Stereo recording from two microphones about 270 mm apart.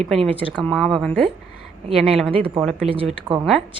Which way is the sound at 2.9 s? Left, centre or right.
Centre.